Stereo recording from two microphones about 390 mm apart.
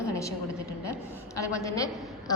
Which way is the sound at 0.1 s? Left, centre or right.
Centre.